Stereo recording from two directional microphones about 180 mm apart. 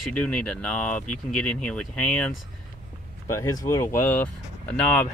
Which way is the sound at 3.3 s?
15° left (ahead or behind).